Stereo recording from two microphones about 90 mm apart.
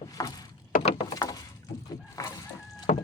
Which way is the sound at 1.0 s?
45° left (ahead or behind).